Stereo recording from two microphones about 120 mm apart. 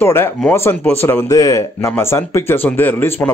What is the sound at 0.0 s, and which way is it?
Speech, 20° left (ahead or behind).